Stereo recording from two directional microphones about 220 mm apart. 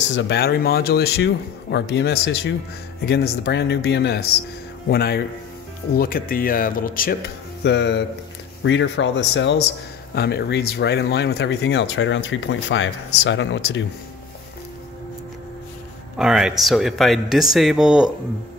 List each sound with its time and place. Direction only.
0.0 s speech: 55° left (ahead or behind)
16.2 s speech: centre (ahead or behind)